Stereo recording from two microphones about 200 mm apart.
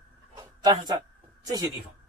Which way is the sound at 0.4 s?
20° right (ahead or behind).